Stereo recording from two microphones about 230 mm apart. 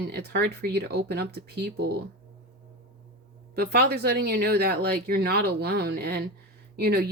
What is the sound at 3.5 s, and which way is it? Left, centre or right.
Speech, right.